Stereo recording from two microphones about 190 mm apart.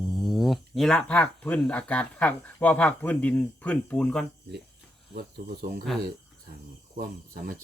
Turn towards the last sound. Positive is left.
turn(degrees=-50)  # may be behind; listen again after turning